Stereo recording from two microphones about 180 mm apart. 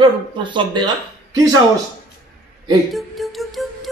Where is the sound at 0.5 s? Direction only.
25° right (ahead or behind).